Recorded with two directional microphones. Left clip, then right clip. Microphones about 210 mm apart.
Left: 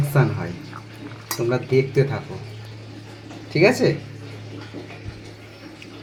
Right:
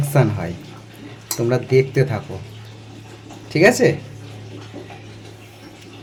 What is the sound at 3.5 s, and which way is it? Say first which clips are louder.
Speech: right 3 dB; 50° right (ahead or behind).